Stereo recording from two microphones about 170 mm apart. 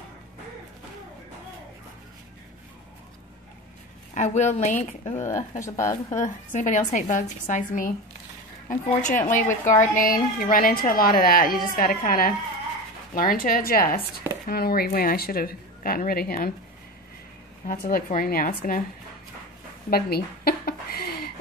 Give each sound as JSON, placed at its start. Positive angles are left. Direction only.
{"t": 4.1, "sound": "a woman's voice", "side_deg": 45}
{"t": 5.2, "sound": "speech", "side_deg": 15}
{"t": 6.1, "sound": "a woman's voice", "side_deg": 50}
{"t": 17.6, "sound": "speech", "side_deg": 55}
{"t": 19.9, "sound": "a sound", "side_deg": 65}